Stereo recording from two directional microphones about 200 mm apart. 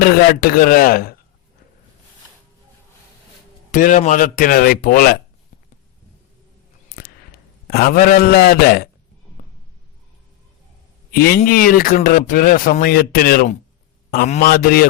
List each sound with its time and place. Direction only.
0.0 s a man's voice: 50° left (ahead or behind)
3.7 s a man's voice: 40° left (ahead or behind)
6.9 s a sound: 45° left (ahead or behind)
7.7 s a man's voice: 50° left (ahead or behind)
11.1 s a man's voice: 50° left (ahead or behind)